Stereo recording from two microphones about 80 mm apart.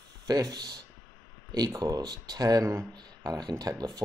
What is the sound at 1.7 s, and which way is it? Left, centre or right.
Speech, right.